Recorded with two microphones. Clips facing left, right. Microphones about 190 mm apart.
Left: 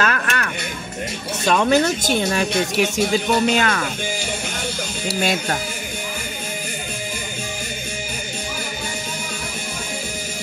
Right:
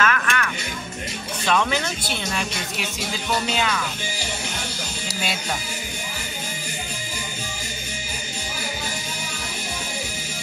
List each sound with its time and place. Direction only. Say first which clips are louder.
0.0 s music: left 1 dB; 40° left (ahead or behind)
1.4 s speech: left 6 dB; 45° left (ahead or behind)
5.0 s speech: left 8 dB; 55° left (ahead or behind)